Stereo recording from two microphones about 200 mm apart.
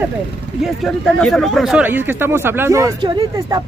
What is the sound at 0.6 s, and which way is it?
Speech, centre (ahead or behind).